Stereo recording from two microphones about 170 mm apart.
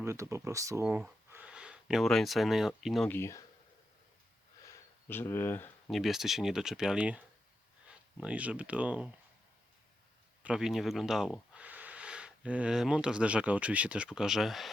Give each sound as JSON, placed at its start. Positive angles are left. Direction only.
{"t": 0.0, "sound": "speech", "side_deg": -15}
{"t": 3.1, "sound": "speech", "side_deg": 15}
{"t": 4.6, "sound": "a sound", "side_deg": 10}
{"t": 5.2, "sound": "speech", "side_deg": 15}
{"t": 5.9, "sound": "speech", "side_deg": 0}
{"t": 10.4, "sound": "speech", "side_deg": -5}